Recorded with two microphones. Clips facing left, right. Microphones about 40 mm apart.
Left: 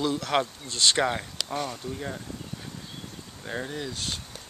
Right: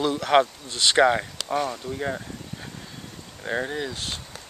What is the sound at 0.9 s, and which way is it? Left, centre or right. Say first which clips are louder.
Speech: right 7 dB; right.